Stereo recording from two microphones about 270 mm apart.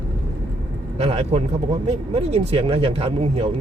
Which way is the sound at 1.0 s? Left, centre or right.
Right.